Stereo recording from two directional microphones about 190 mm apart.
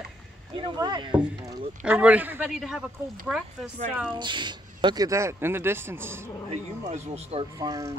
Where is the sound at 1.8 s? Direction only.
5° right (ahead or behind).